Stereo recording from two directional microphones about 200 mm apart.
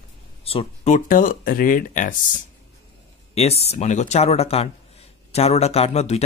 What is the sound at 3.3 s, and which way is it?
Speech, 30° left (ahead or behind).